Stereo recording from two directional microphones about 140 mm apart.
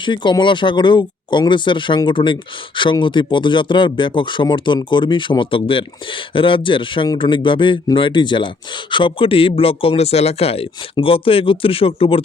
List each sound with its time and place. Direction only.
0.0 s speech: 35° left (ahead or behind)